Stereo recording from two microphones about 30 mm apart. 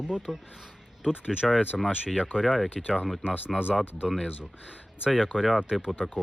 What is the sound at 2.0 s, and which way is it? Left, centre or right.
Speech, right.